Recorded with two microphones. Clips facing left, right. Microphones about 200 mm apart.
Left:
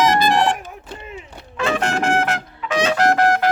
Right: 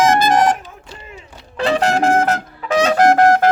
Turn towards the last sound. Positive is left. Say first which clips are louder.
# right 5 dB
turn(degrees=-45)  # may be behind; listen again after turning